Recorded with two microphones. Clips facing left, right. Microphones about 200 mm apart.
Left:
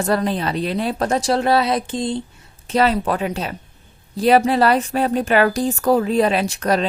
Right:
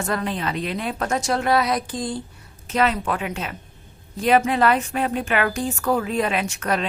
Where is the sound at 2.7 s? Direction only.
35° left (ahead or behind).